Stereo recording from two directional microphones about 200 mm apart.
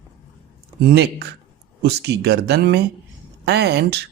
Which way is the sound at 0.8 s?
55° right (ahead or behind).